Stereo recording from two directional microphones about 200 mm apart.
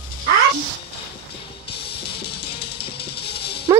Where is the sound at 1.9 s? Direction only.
55° left (ahead or behind).